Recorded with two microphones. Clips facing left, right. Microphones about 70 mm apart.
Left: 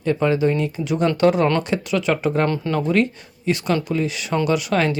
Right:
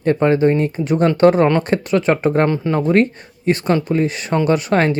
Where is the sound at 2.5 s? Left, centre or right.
Right.